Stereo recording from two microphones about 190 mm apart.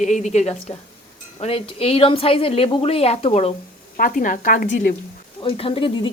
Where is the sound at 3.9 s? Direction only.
45° left (ahead or behind).